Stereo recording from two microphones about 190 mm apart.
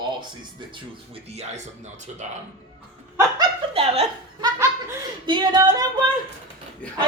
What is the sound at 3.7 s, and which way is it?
A woman's voice, 30° right (ahead or behind).